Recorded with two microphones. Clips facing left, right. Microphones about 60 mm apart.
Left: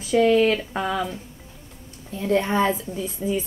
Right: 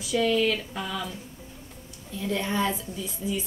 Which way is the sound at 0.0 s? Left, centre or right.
Left.